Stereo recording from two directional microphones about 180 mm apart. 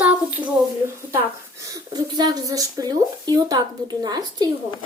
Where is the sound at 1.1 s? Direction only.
15° right (ahead or behind).